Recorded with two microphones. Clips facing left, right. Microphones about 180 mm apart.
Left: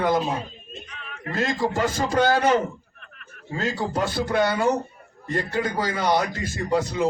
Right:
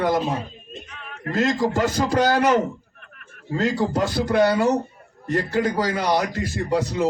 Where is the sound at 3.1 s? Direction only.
50° right (ahead or behind).